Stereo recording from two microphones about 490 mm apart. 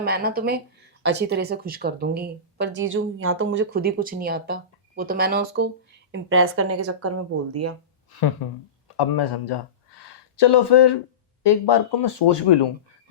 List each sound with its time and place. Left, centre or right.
0.0 s speech: centre
8.4 s speech: left